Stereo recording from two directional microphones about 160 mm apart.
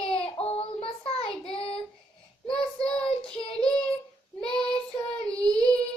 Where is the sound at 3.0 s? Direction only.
35° left (ahead or behind).